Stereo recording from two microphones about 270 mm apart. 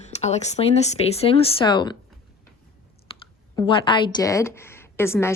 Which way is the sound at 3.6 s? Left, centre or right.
Centre.